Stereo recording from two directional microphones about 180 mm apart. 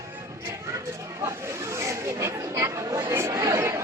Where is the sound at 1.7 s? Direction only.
15° right (ahead or behind).